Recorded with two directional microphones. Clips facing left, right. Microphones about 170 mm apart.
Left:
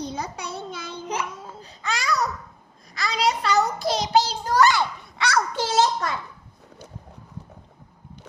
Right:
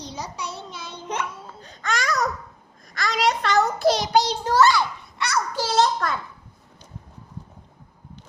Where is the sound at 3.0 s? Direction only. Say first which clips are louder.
Right 1 dB; centre (ahead or behind).